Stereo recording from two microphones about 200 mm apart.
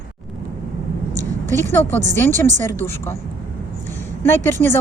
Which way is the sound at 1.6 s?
10° left (ahead or behind).